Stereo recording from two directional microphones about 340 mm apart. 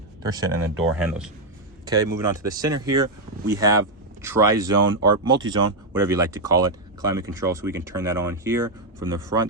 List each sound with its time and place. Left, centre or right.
0.2 s speech: centre
0.7 s speech: right
0.9 s speech: centre
1.8 s a sound: centre
2.1 s speech: centre